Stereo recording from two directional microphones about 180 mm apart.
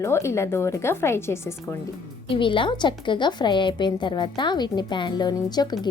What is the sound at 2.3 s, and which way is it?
A woman's voice, 30° left (ahead or behind).